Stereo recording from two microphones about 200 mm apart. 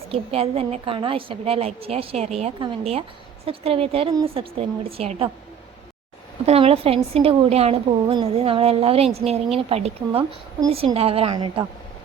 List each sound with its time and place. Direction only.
0.1 s a woman's voice: 30° right (ahead or behind)
6.4 s a woman's voice: 30° right (ahead or behind)